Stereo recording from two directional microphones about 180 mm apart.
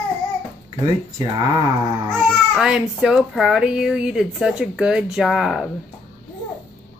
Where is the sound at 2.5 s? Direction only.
5° right (ahead or behind).